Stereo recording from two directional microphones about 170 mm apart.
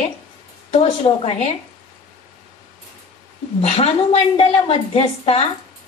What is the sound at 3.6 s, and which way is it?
A woman's voice, 40° left (ahead or behind).